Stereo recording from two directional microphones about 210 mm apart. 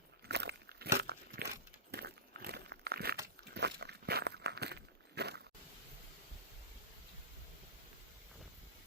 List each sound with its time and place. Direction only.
0.3 s keys jangling: 50° right (ahead or behind)
0.9 s crunch: 50° right (ahead or behind)
1.9 s a sound: 50° right (ahead or behind)
3.5 s walk: 55° right (ahead or behind)